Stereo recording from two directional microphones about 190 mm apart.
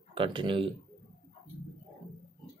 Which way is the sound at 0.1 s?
25° right (ahead or behind).